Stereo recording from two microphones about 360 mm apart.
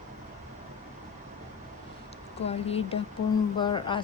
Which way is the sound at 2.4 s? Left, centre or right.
Centre.